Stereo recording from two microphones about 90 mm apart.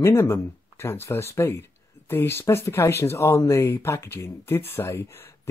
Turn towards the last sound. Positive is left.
turn(degrees=30)  # may be behind; listen again after turning